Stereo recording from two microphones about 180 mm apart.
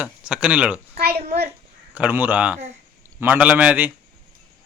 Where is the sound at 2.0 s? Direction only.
10° right (ahead or behind).